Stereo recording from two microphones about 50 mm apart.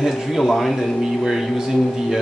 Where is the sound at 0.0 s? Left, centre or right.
Centre.